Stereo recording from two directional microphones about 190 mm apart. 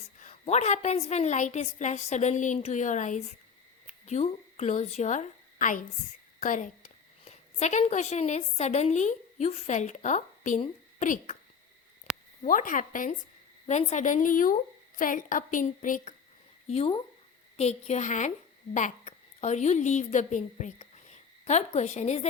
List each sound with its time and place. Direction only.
0.0 s a woman's voice: 40° left (ahead or behind)
12.4 s a woman's voice: 45° left (ahead or behind)
16.6 s a woman's voice: 30° left (ahead or behind)